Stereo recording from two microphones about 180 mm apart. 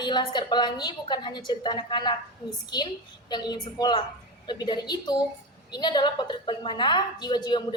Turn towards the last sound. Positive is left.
turn(degrees=25)  # may be behind; listen again after turning